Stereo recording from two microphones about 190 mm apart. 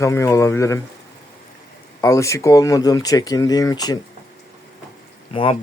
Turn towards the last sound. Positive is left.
turn(degrees=30)  # may be behind; listen again after turning